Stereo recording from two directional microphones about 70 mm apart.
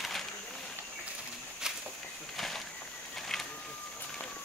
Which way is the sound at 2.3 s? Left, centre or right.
Centre.